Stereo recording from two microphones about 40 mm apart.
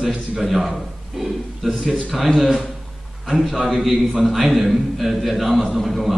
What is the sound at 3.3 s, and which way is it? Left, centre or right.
A man's voice, centre.